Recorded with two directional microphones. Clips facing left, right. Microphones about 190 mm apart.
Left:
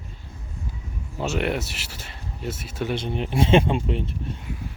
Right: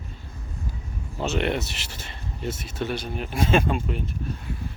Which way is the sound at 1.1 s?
10° left (ahead or behind).